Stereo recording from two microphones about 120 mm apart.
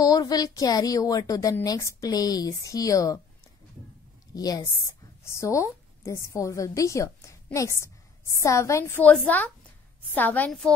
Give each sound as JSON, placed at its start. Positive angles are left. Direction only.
{"t": 0.0, "sound": "a woman's voice", "side_deg": 30}
{"t": 4.3, "sound": "a woman's voice", "side_deg": 35}